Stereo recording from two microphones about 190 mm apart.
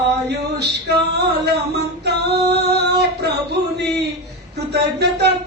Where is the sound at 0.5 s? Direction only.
60° right (ahead or behind).